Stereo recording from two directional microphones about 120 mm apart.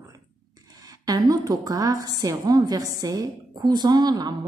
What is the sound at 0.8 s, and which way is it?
A woman's voice, 30° right (ahead or behind).